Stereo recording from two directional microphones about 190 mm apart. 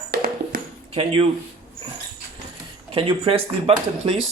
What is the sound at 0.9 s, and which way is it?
Speech, 30° right (ahead or behind).